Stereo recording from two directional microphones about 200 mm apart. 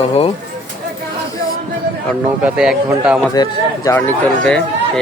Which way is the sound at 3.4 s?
20° left (ahead or behind).